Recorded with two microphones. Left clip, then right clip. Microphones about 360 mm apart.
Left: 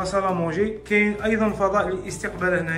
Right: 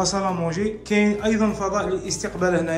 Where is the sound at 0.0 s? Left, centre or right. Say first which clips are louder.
Even; centre.